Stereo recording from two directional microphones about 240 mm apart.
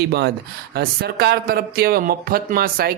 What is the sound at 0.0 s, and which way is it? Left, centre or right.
Speech, right.